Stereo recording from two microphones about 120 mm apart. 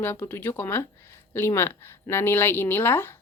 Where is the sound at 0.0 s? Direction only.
15° left (ahead or behind).